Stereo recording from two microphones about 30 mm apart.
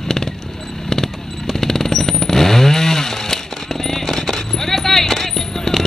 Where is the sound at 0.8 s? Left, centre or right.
Centre.